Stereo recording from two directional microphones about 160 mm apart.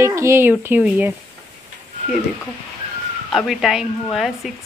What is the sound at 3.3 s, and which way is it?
Speech, centre (ahead or behind).